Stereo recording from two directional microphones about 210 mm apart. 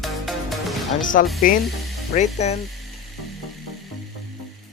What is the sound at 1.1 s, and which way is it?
Speech, 40° left (ahead or behind).